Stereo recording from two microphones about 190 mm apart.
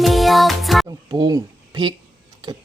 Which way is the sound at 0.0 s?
Centre (ahead or behind).